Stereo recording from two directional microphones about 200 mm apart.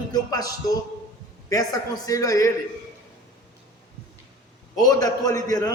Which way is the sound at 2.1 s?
15° left (ahead or behind).